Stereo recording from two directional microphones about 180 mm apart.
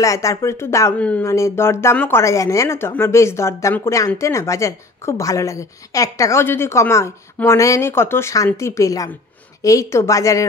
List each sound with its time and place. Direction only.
0.0 s speech: 15° left (ahead or behind)